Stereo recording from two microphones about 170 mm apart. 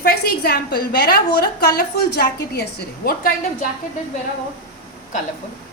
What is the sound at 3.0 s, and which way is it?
Speech, 55° left (ahead or behind).